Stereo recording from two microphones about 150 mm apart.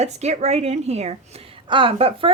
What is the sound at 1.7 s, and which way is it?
Speech, 35° right (ahead or behind).